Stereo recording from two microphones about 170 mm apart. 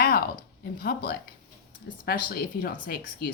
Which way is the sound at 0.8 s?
65° left (ahead or behind).